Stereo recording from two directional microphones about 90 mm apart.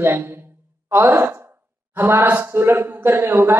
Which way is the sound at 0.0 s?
30° right (ahead or behind).